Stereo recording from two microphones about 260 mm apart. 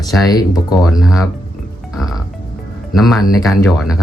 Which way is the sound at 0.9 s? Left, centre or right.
Centre.